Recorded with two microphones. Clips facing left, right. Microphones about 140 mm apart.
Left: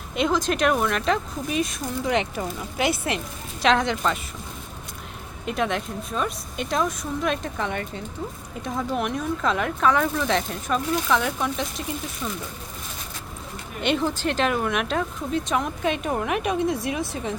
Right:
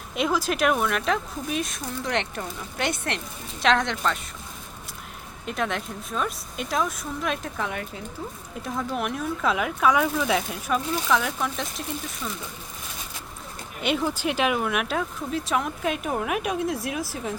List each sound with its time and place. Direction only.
0.1 s speech: 5° right (ahead or behind)
5.5 s speech: centre (ahead or behind)
13.8 s speech: 5° right (ahead or behind)